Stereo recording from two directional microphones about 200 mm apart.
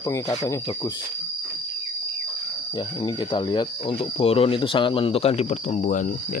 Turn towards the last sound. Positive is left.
turn(degrees=35)  # may be behind; listen again after turning